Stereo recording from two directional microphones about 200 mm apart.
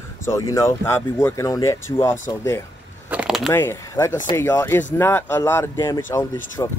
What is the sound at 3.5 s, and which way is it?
Speech, 10° left (ahead or behind).